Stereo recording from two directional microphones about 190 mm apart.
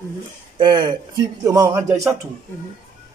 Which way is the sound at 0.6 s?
25° right (ahead or behind).